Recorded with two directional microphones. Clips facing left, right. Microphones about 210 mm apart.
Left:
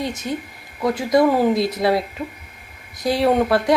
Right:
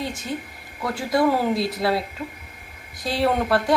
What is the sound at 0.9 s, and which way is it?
A woman's voice, 20° left (ahead or behind).